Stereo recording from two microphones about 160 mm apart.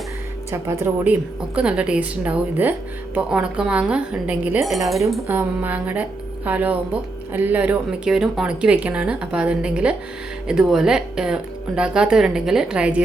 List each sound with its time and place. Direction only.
0.5 s a woman's voice: 15° right (ahead or behind); by 4.9 s centre (ahead or behind)
5.3 s a woman's voice: 10° right (ahead or behind)